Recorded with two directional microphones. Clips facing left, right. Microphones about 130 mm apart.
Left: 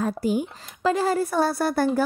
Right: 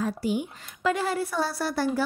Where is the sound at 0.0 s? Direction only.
45° left (ahead or behind).